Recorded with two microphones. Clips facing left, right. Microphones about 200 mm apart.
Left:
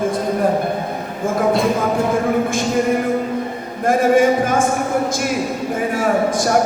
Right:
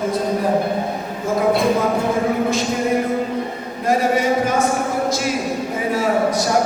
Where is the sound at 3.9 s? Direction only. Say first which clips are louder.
Left 4 dB; 50° left (ahead or behind).